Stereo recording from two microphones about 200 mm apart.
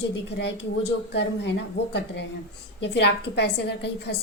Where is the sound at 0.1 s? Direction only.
60° left (ahead or behind).